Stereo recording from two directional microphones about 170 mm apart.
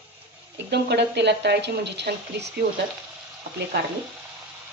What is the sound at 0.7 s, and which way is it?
Speech, 80° right.